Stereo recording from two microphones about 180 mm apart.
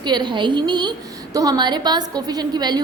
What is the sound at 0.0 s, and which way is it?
A woman's voice, 25° right (ahead or behind).